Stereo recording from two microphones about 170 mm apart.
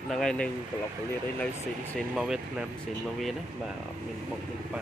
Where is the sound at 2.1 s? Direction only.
5° right (ahead or behind).